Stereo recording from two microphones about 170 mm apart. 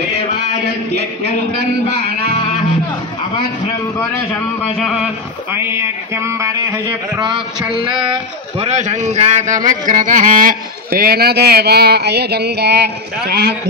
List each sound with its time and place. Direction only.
0.9 s speech: 75° right (ahead or behind)
4.7 s a sound: centre (ahead or behind); by 7.3 s 20° right (ahead or behind)
7.8 s speech: 30° right (ahead or behind)
8.5 s speech: 40° right (ahead or behind); by 13.6 s 70° right (ahead or behind)